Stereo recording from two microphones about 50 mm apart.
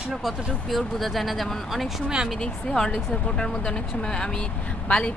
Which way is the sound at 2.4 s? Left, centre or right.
Centre.